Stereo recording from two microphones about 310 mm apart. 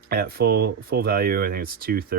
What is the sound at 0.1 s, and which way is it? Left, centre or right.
Speech, right.